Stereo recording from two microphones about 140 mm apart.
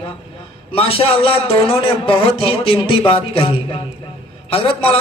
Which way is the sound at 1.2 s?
40° left (ahead or behind).